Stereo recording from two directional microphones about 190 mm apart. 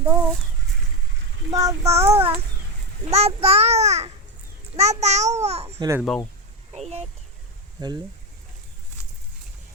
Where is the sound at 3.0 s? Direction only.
35° right (ahead or behind).